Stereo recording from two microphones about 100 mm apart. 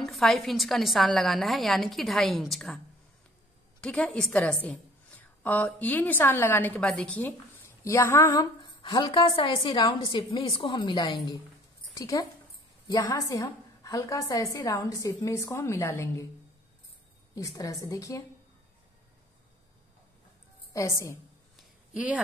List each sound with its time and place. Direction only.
0.0 s a woman's voice: 5° left (ahead or behind)
3.8 s a woman's voice: 10° left (ahead or behind)
6.8 s a woman's voice: 10° left (ahead or behind)
7.8 s a woman's voice: 30° left (ahead or behind)
8.4 s a woman's voice: 50° left (ahead or behind)
11.9 s a woman's voice: 35° left (ahead or behind)
17.4 s a woman's voice: 35° left (ahead or behind)
20.7 s a woman's voice: 30° left (ahead or behind)
21.5 s a sound: 10° right (ahead or behind)